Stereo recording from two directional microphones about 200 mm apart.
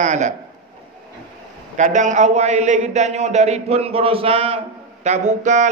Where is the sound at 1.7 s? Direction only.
40° right (ahead or behind).